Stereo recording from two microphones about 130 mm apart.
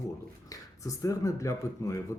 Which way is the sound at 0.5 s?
25° left (ahead or behind).